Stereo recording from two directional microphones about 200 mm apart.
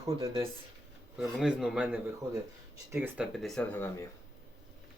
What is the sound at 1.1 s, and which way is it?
Speech, 5° right (ahead or behind).